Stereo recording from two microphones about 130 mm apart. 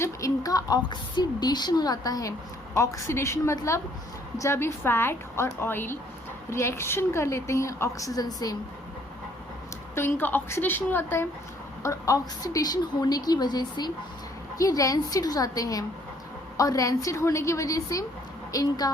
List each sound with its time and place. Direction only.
0.0 s a woman's voice: 25° left (ahead or behind)
9.9 s a woman's voice: 15° left (ahead or behind)